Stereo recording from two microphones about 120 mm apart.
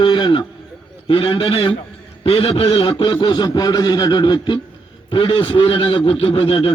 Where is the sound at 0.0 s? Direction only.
40° left (ahead or behind).